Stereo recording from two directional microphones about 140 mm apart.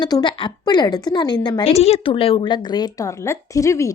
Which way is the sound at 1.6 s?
45° left (ahead or behind).